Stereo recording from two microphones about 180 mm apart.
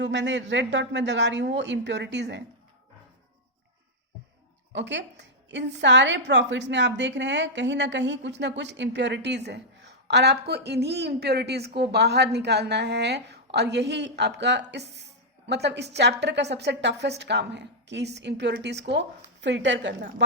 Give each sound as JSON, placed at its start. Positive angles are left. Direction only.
{"t": 0.0, "sound": "a woman's voice", "side_deg": -85}
{"t": 4.7, "sound": "a woman's voice", "side_deg": -80}